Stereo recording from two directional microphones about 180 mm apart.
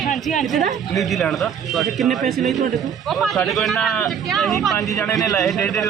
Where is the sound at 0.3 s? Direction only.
Centre (ahead or behind).